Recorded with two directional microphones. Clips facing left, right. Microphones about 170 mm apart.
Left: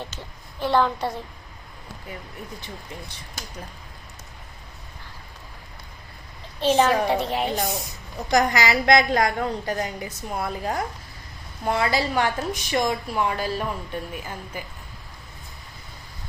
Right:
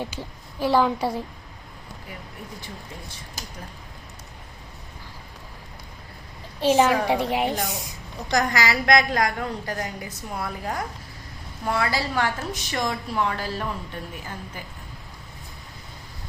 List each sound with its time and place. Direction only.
0.0 s speech: 10° right (ahead or behind)
6.6 s a woman's voice: 10° right (ahead or behind)
8.3 s a woman's voice: 20° left (ahead or behind)